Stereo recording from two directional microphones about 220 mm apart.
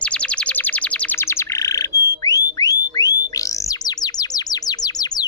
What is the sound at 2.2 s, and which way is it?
Whistle, 15° left (ahead or behind).